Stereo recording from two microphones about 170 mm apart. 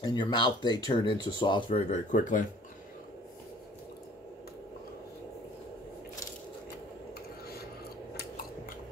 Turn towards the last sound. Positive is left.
turn(degrees=65)  # may be behind; listen again after turning